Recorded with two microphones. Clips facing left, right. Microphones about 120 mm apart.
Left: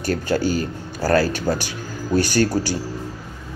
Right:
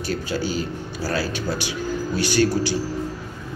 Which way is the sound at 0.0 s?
45° left (ahead or behind).